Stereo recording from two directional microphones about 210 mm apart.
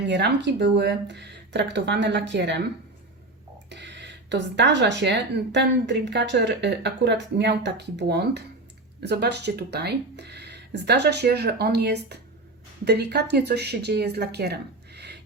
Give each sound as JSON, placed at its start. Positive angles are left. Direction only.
{"t": 0.0, "sound": "speech", "side_deg": -55}
{"t": 3.7, "sound": "speech", "side_deg": -55}